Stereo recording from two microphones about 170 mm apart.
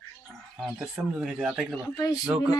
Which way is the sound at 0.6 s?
5° right (ahead or behind).